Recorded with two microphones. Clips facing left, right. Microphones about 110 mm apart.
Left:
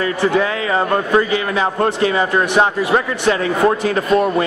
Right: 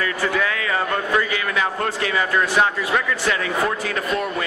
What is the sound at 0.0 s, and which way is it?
A man's voice, 25° left (ahead or behind).